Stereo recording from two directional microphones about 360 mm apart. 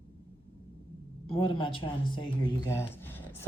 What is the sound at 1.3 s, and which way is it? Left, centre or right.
Speech, centre.